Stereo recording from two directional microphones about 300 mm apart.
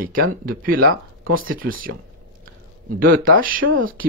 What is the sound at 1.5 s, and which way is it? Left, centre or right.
Speech, right.